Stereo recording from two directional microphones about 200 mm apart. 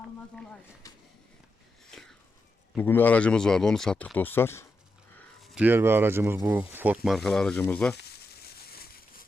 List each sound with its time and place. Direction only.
0.8 s a sound: 15° left (ahead or behind)
1.9 s wheeze: centre (ahead or behind)
2.7 s speech: 10° left (ahead or behind)
5.1 s speech: centre (ahead or behind)
7.9 s crumpling: 55° left (ahead or behind)